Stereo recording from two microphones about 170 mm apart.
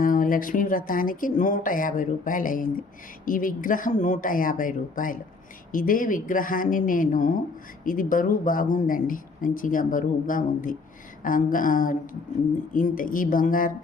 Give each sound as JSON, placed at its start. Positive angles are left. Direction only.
{"t": 0.0, "sound": "speech", "side_deg": 55}